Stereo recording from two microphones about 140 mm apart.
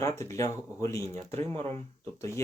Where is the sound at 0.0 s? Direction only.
20° left (ahead or behind).